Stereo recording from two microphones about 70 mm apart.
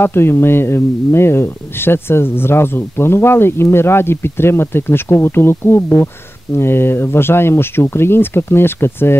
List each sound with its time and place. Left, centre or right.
0.0 s speech: left